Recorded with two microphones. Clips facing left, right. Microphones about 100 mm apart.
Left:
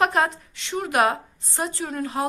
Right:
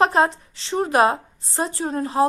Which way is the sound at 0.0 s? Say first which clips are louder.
Right 3 dB; 30° right (ahead or behind).